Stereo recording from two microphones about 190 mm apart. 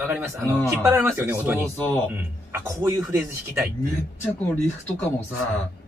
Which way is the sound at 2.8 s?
15° right (ahead or behind).